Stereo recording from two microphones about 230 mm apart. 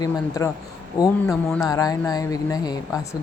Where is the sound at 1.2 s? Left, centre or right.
Centre.